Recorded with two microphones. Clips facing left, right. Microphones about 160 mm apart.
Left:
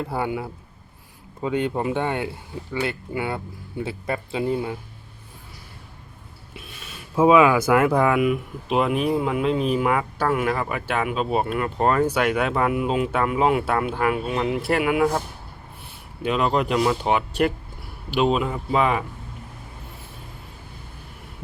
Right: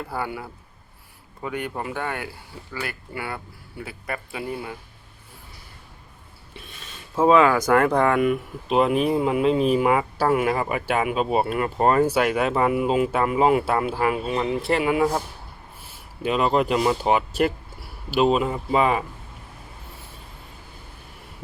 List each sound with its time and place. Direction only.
0.0 s speech: 20° left (ahead or behind)
7.2 s speech: 10° left (ahead or behind)